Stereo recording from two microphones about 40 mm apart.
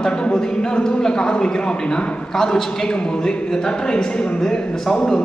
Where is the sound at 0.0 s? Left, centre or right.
Centre.